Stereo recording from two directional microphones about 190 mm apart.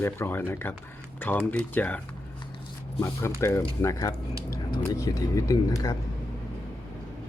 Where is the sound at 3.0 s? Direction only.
15° left (ahead or behind).